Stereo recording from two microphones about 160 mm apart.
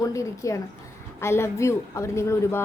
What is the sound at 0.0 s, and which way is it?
A woman's voice, 20° left (ahead or behind).